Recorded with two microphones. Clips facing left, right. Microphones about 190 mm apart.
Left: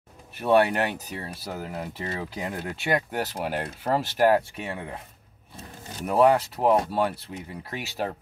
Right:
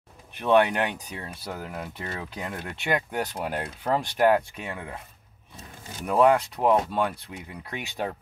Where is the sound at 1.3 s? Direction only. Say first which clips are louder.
Even; 30° left (ahead or behind).